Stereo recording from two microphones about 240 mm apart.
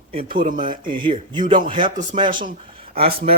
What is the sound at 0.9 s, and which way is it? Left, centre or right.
Speech, right.